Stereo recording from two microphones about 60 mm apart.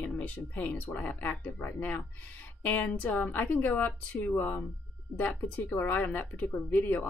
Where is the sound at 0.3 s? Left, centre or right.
Left.